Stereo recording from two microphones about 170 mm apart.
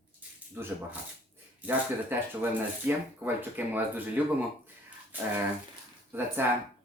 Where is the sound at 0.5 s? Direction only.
15° right (ahead or behind).